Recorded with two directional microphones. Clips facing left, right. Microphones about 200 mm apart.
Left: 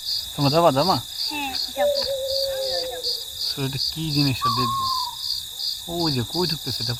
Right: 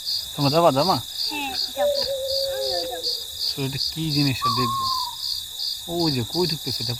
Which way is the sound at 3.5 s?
Centre (ahead or behind).